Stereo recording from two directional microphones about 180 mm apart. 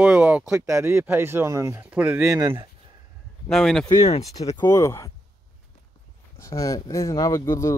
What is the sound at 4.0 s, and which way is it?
Speech, 35° left (ahead or behind).